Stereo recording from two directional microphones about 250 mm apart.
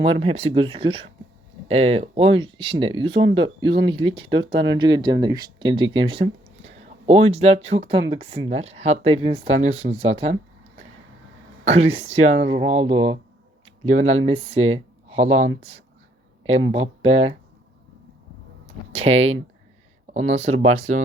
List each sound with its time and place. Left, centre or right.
0.0 s speech: right
11.6 s speech: right
16.7 s speech: right
18.9 s speech: right